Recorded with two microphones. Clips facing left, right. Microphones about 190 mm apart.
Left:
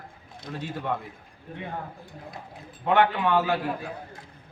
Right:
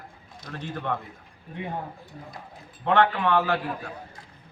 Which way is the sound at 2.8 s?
10° left (ahead or behind).